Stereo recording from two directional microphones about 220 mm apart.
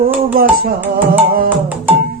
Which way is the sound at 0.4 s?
40° right (ahead or behind).